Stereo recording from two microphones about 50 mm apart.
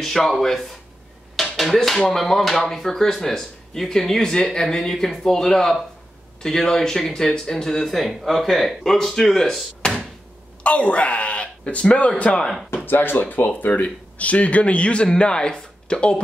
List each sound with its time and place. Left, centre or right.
0.0 s speech: centre
1.3 s a sound: centre
1.8 s speech: centre
9.8 s a sound: centre
10.6 s speech: left
12.7 s speech: left; by 16.2 s centre